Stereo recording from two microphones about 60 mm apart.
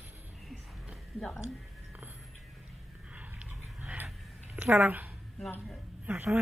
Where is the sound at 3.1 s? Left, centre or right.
Right.